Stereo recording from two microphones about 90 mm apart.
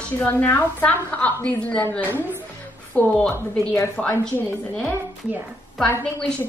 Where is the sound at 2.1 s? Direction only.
25° right (ahead or behind).